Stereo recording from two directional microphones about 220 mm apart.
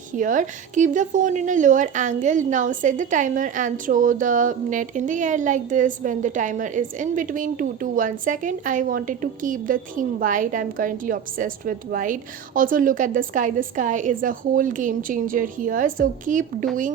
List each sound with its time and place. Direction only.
0.2 s a woman's voice: 35° right (ahead or behind)